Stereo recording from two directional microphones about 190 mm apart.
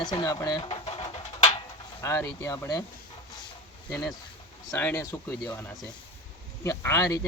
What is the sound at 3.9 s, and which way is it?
Speech, 15° left (ahead or behind).